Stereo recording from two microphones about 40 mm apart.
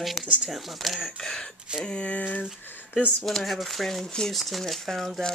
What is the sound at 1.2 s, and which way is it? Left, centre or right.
Speech, centre.